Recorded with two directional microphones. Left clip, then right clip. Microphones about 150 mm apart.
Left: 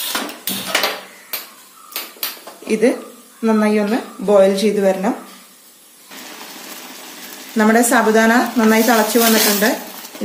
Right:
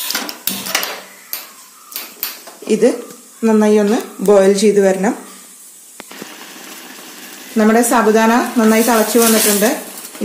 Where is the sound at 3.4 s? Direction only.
45° right (ahead or behind).